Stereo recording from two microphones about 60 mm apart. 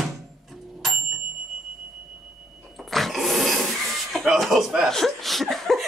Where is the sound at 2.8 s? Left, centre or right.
Centre.